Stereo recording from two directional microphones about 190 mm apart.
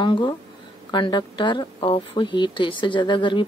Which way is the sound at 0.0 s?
25° left (ahead or behind).